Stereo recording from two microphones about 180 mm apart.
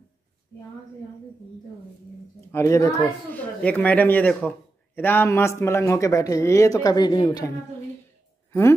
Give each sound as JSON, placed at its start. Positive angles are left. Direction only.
{"t": 2.5, "sound": "a man's voice", "side_deg": 15}